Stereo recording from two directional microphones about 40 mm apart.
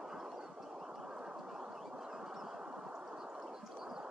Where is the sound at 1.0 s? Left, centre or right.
Right.